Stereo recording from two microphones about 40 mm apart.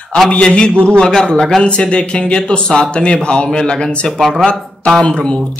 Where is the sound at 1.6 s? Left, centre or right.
Left.